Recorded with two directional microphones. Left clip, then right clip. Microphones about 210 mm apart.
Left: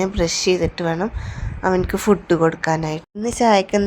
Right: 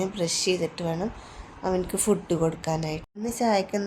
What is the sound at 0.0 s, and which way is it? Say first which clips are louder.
A woman's voice: left 7 dB; 20° left (ahead or behind).